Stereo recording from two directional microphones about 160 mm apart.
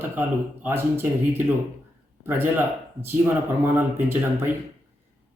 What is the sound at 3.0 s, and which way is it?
Speech, 15° right (ahead or behind).